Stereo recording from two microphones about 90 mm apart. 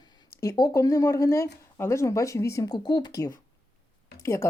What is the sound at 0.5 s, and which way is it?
A woman's voice, 45° left (ahead or behind).